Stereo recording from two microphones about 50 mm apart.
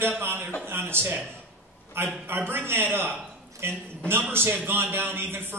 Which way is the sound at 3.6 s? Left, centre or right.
Right.